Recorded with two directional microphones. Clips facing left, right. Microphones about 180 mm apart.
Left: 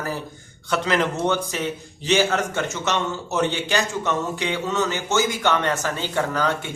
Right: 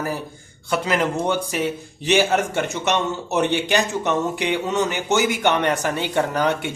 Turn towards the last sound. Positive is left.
turn(degrees=-20)  # may be behind; listen again after turning